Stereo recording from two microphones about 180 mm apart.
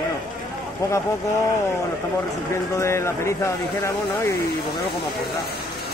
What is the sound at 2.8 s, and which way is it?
Speech, 15° left (ahead or behind).